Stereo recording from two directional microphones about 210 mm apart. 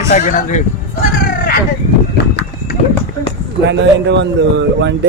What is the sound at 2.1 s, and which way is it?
Run, 50° left (ahead or behind).